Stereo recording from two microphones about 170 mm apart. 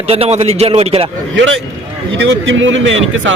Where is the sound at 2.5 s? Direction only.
90° right.